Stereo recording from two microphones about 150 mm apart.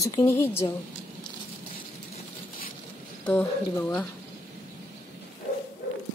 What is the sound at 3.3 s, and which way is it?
Speech, 10° left (ahead or behind).